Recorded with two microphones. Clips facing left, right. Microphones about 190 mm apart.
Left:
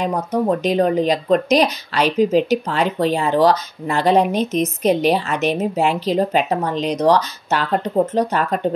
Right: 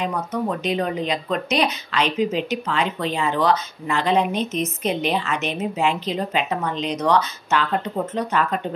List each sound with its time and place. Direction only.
0.0 s speech: 35° left (ahead or behind)